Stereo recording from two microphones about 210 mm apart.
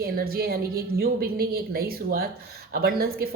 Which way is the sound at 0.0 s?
45° right (ahead or behind).